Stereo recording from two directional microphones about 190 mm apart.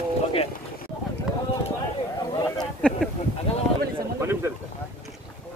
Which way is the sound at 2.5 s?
Centre (ahead or behind).